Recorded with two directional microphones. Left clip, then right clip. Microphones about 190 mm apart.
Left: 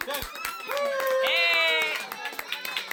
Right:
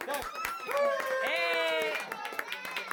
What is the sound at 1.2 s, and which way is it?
Music, 25° right (ahead or behind).